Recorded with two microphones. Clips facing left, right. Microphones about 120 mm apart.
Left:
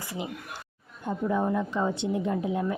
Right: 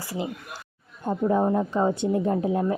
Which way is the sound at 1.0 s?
40° right (ahead or behind).